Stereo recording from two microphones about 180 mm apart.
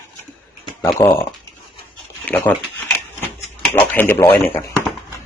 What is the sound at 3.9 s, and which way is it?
Speech, 10° left (ahead or behind).